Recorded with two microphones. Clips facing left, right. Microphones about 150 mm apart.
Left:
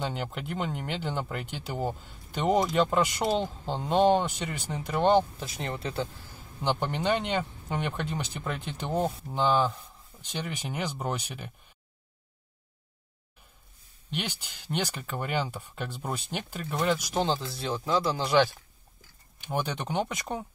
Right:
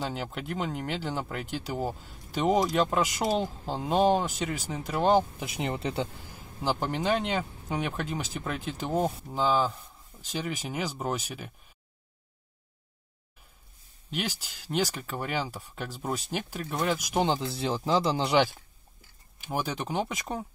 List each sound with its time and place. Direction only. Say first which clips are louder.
0.0 s speech: even; centre (ahead or behind); by 6.0 s 20° right (ahead or behind)
6.6 s speech: even; centre (ahead or behind)
14.1 s speech: right 2 dB; 5° right (ahead or behind)
16.9 s speech: right 2 dB; 10° right (ahead or behind)
19.4 s speech: even; 5° right (ahead or behind)